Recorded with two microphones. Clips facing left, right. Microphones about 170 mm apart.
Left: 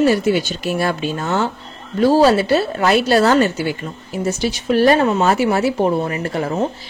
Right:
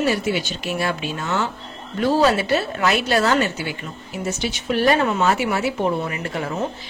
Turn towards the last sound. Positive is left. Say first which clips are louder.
# left 5 dB
turn(degrees=40)  # may be behind; listen again after turning